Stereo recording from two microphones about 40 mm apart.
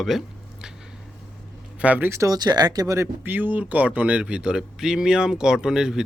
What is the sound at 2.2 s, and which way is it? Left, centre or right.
Speech, right.